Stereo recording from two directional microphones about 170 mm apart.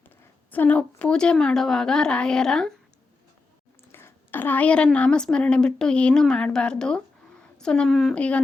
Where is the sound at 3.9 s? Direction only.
15° left (ahead or behind).